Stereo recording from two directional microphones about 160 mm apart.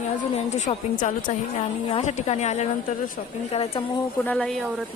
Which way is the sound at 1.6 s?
40° left (ahead or behind).